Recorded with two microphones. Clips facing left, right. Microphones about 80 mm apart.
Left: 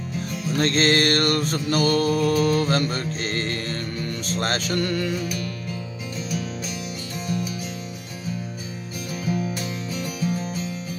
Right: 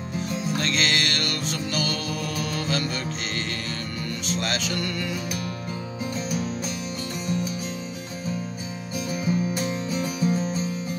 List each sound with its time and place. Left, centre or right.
0.6 s music: left
9.1 s music: right